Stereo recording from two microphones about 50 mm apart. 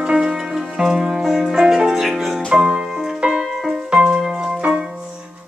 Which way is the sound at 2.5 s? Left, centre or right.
Centre.